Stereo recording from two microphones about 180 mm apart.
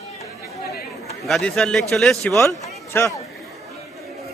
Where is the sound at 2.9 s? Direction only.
15° left (ahead or behind).